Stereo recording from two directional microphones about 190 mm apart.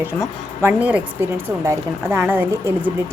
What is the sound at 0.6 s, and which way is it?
A woman's voice, 10° right (ahead or behind).